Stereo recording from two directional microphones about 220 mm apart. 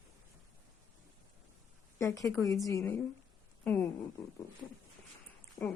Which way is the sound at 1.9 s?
15° left (ahead or behind).